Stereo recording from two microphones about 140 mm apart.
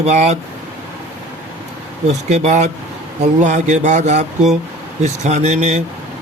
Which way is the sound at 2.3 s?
55° right (ahead or behind).